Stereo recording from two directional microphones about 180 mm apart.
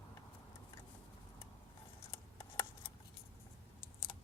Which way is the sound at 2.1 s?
20° left (ahead or behind).